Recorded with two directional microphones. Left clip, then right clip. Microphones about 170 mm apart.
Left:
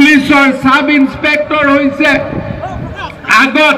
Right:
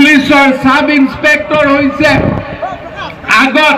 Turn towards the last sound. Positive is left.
turn(degrees=-50)  # may be behind; listen again after turning